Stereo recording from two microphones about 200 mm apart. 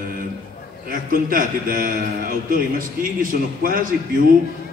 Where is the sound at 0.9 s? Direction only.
45° right (ahead or behind).